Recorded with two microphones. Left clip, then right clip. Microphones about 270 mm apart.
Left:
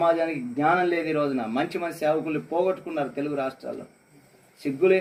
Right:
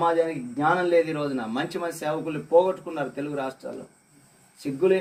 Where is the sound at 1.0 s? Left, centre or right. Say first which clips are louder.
Left 3 dB; centre.